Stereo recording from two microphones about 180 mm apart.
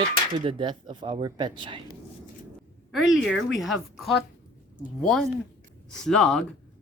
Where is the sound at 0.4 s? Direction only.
25° right (ahead or behind).